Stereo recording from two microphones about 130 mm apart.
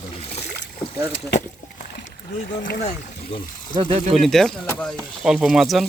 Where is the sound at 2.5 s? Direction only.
90° left.